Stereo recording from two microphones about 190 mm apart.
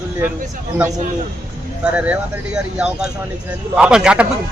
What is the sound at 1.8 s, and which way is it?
A man's voice, 5° right (ahead or behind).